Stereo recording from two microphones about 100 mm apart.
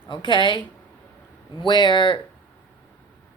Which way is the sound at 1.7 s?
50° left (ahead or behind).